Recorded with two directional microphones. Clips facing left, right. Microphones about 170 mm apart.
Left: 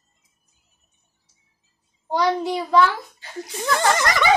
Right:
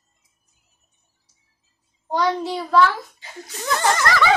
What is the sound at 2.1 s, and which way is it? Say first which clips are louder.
A child's voice: left 1 dB; 10° left (ahead or behind).